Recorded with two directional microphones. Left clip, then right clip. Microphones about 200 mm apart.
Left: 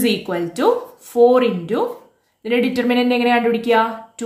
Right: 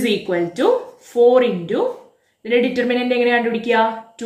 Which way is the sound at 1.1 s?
90° left.